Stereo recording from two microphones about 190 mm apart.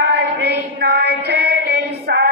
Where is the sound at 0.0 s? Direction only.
60° right (ahead or behind).